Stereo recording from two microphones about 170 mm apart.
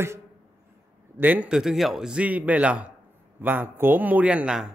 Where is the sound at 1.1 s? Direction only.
10° right (ahead or behind).